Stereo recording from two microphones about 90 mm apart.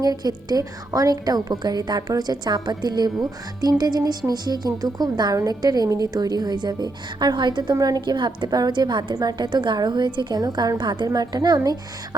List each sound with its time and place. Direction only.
0.0 s a woman's voice: 45° right (ahead or behind)